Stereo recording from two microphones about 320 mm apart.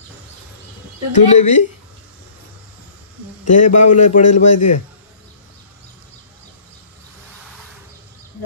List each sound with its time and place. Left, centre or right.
1.1 s a man's voice: left
3.4 s a man's voice: left